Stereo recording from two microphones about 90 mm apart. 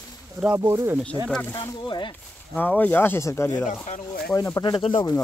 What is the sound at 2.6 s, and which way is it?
Speech, 20° left (ahead or behind).